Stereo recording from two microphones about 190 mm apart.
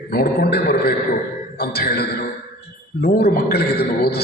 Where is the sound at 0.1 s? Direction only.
55° left (ahead or behind).